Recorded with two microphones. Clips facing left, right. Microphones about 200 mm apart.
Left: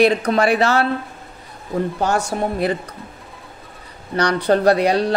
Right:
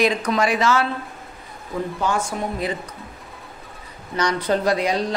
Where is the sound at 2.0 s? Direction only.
75° left (ahead or behind).